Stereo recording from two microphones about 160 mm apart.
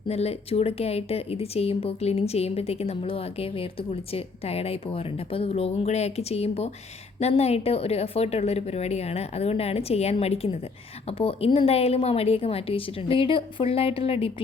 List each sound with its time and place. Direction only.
0.1 s speech: 40° left (ahead or behind)